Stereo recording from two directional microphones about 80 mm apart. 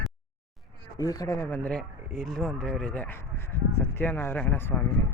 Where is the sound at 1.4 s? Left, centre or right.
Left.